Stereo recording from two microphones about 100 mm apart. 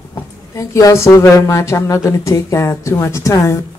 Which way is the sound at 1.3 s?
30° left (ahead or behind).